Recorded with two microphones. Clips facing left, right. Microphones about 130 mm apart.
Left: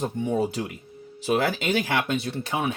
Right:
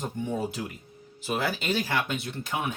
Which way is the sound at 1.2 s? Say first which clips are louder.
Left 5 dB; 70° left (ahead or behind).